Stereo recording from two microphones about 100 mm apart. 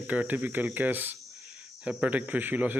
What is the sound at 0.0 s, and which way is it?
Speech, 15° right (ahead or behind).